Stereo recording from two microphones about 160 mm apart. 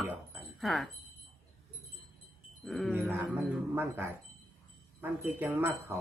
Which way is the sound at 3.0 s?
15° right (ahead or behind).